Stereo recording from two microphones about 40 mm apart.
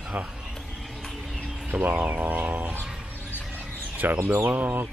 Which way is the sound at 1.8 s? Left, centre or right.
Right.